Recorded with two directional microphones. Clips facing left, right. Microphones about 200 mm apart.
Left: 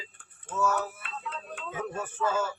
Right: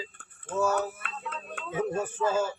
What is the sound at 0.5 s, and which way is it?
Speech, 35° right (ahead or behind).